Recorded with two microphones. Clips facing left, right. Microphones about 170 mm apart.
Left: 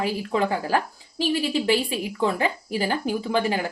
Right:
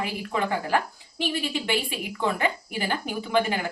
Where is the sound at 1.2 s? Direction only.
35° left (ahead or behind).